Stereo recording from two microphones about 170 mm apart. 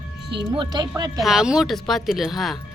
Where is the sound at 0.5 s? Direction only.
25° right (ahead or behind).